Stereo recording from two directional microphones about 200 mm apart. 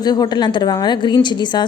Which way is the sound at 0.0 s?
20° left (ahead or behind).